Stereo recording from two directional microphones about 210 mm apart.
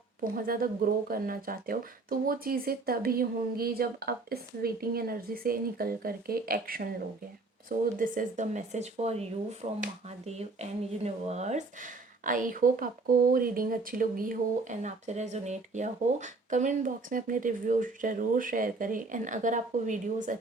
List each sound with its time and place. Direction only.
0.3 s speech: 45° right (ahead or behind)
7.9 s speech: 40° right (ahead or behind)